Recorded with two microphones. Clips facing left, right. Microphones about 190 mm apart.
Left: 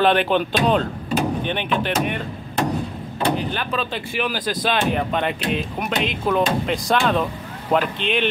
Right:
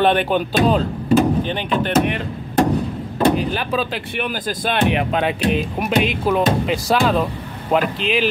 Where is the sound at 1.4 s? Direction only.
35° right (ahead or behind).